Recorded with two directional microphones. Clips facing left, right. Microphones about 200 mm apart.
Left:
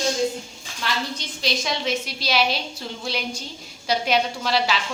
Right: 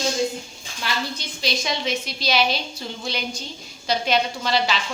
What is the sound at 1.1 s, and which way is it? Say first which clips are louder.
A woman's voice: even; centre (ahead or behind).